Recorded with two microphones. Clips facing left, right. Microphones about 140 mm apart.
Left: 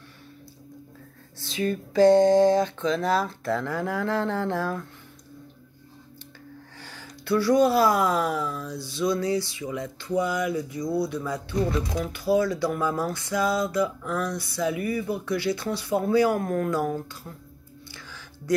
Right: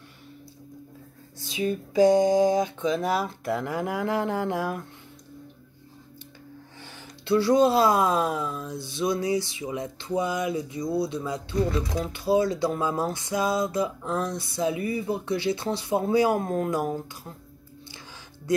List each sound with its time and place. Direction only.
1.5 s a sound: 10° right (ahead or behind)
6.8 s speech: 20° right (ahead or behind)
17.9 s music: 20° right (ahead or behind)